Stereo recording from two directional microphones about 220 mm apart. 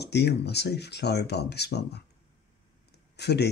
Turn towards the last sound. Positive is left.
turn(degrees=50)  # may be behind; listen again after turning